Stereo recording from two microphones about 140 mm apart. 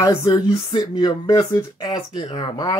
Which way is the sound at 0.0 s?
25° left (ahead or behind).